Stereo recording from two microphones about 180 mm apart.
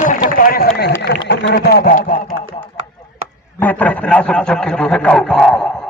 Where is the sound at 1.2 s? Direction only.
80° left; by 2.2 s 50° left (ahead or behind).